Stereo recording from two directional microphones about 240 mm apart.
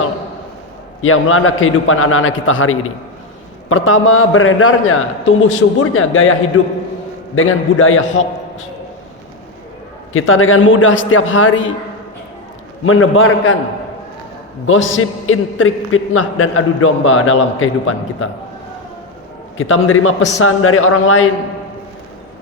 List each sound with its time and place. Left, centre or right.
1.0 s a man's voice: left
7.3 s a man's voice: left
10.1 s a man's voice: left
12.8 s a man's voice: left
14.7 s a man's voice: left
19.5 s a man's voice: left